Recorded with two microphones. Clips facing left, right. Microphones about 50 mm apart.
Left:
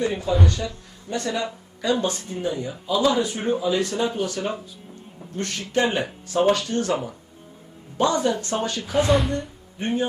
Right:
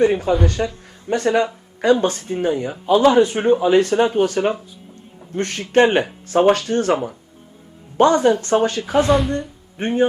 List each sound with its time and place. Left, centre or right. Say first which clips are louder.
0.0 s speech: right 6 dB; right
9.0 s speech: right 4 dB; centre
9.7 s speech: right 7 dB; right